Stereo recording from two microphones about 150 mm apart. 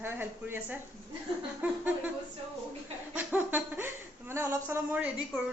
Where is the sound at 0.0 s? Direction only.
15° right (ahead or behind).